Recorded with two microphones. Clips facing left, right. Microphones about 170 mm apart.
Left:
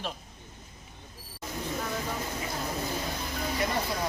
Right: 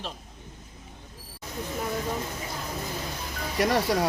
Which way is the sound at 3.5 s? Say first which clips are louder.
Right 8 dB; 80° right.